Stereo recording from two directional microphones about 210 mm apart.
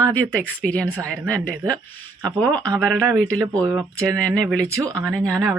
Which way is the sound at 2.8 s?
5° left (ahead or behind).